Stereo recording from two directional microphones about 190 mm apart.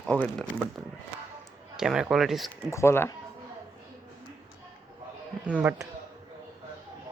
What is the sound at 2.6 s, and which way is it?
Speech, 15° left (ahead or behind).